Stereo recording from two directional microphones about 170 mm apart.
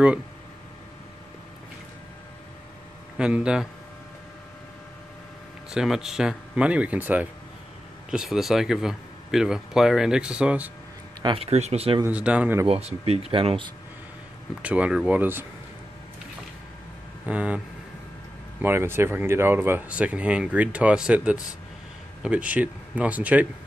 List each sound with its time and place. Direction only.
3.2 s speech: 5° right (ahead or behind)
5.7 s speech: 5° right (ahead or behind)
11.2 s speech: 35° right (ahead or behind)
12.0 s speech: 5° right (ahead or behind)
12.6 s speech: 35° right (ahead or behind)
14.6 s speech: 10° right (ahead or behind)
17.3 s speech: 10° right (ahead or behind)
18.6 s speech: 15° right (ahead or behind)